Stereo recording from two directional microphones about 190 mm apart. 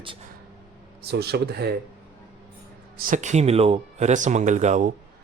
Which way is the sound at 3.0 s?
45° right (ahead or behind).